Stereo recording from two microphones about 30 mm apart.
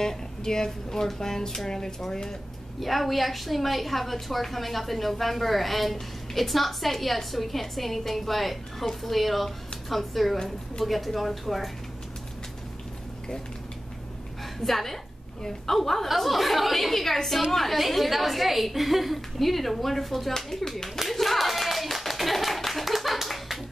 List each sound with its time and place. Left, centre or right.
0.0 s a woman's voice: centre
2.8 s a woman's voice: centre
14.6 s a woman's voice: centre
21.1 s clapping: centre